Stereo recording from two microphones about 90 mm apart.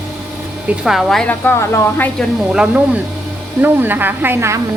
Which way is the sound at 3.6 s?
20° right (ahead or behind).